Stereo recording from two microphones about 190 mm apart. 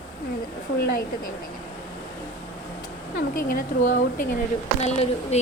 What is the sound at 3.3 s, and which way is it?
A woman's voice, 50° left (ahead or behind).